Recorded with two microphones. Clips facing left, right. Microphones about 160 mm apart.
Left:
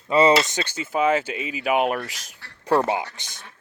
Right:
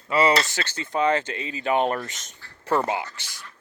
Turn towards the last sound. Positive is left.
turn(degrees=20)  # may be behind; listen again after turning